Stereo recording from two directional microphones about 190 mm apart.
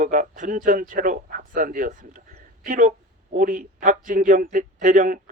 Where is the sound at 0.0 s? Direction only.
40° right (ahead or behind).